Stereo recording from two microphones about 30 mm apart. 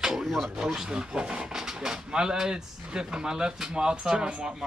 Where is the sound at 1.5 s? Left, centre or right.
Centre.